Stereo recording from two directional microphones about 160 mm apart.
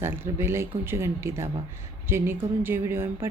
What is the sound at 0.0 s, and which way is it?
A woman's voice, 15° right (ahead or behind).